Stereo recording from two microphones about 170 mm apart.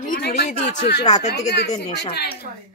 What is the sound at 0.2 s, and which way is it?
Speech, 65° left (ahead or behind).